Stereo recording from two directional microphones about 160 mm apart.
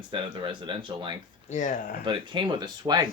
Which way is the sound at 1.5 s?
55° left (ahead or behind).